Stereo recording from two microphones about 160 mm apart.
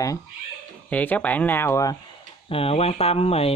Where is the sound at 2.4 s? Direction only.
35° left (ahead or behind).